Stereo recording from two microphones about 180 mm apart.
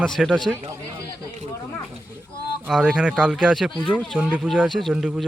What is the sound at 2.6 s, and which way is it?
Speech, centre (ahead or behind).